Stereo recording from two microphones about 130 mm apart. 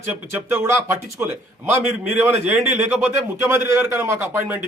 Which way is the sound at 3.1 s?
20° right (ahead or behind).